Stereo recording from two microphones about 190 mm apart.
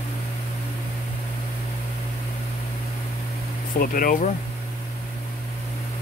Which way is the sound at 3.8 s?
50° left (ahead or behind).